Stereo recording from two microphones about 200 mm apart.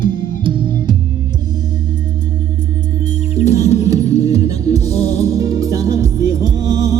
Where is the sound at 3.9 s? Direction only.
15° right (ahead or behind).